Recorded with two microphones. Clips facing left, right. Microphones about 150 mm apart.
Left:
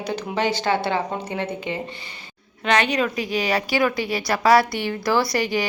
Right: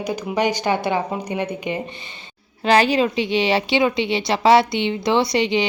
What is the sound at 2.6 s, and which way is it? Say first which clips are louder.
A woman's voice: right 4 dB; 35° right (ahead or behind).